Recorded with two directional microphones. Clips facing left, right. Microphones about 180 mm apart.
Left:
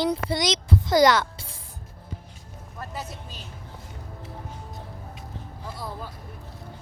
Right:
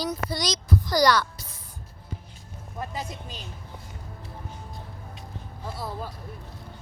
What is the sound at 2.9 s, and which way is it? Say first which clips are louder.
Speech: right 1 dB; 15° right (ahead or behind).